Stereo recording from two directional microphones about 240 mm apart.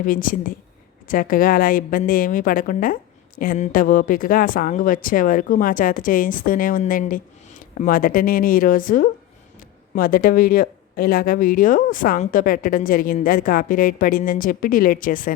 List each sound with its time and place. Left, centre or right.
0.0 s a woman's voice: left